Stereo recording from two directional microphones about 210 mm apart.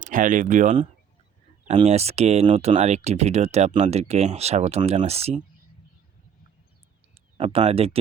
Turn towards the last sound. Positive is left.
turn(degrees=-25)  # may be behind; listen again after turning